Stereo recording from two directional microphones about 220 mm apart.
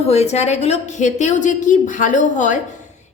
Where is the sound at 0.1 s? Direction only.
30° left (ahead or behind).